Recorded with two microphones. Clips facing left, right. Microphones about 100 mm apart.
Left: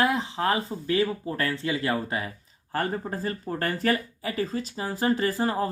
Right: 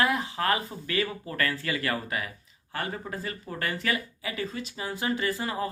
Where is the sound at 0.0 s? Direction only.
25° left (ahead or behind).